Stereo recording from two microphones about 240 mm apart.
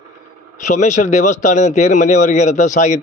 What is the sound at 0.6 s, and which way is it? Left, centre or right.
A man's voice, left.